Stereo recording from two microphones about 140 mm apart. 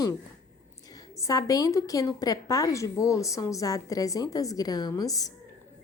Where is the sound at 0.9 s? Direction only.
25° left (ahead or behind).